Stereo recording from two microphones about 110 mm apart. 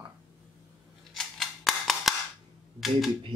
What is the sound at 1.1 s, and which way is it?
Scissors, centre (ahead or behind).